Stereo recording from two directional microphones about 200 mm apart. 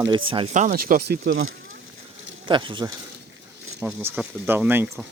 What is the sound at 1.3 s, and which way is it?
Speech, 90° right.